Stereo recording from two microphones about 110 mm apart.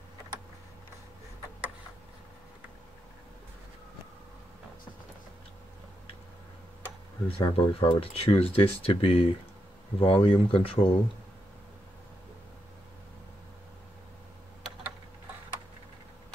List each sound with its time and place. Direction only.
7.2 s speech: 55° left (ahead or behind)